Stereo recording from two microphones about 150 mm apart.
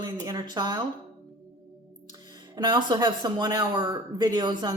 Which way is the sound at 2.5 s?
30° right (ahead or behind).